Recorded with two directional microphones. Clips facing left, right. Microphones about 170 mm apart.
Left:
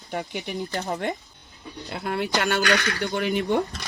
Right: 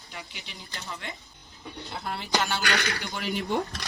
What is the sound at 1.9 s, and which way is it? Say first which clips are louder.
Speech: left 5 dB; 60° left (ahead or behind).